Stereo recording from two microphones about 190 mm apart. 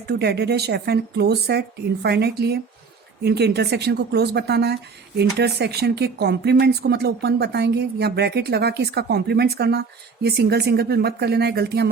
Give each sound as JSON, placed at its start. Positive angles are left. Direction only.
{"t": 0.1, "sound": "speech", "side_deg": -60}